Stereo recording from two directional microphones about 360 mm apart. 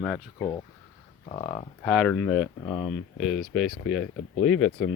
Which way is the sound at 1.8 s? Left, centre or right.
Centre.